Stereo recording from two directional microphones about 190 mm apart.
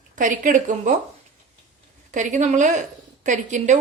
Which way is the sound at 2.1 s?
40° right (ahead or behind).